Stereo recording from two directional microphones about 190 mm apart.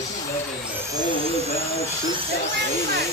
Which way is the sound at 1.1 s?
35° left (ahead or behind).